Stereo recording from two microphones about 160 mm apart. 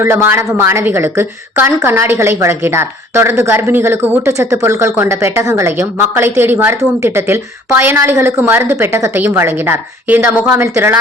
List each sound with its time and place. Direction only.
0.0 s a woman's voice: 15° right (ahead or behind)